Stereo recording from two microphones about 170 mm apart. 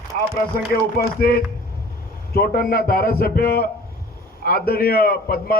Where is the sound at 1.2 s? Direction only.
60° left (ahead or behind).